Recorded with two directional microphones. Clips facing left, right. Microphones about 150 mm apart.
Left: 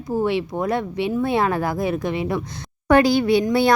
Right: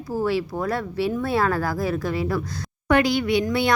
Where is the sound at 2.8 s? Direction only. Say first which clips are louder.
Left 4 dB; 35° left (ahead or behind).